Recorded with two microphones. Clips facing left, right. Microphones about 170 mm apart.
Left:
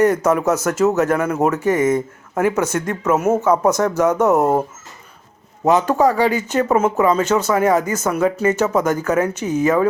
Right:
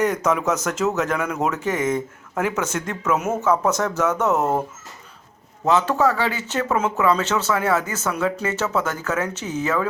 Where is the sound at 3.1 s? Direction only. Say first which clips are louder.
Left 5 dB; 50° left (ahead or behind).